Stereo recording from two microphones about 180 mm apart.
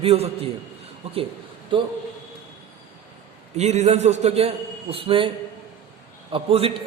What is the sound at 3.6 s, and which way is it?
A man's voice, 40° right (ahead or behind).